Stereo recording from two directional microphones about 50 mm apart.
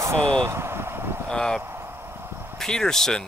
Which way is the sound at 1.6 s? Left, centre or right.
Right.